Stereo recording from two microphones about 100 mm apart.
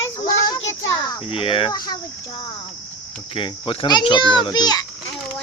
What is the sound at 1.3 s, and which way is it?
Speech, 60° left (ahead or behind).